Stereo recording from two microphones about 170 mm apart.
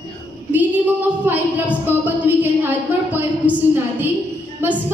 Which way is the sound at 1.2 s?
10° right (ahead or behind).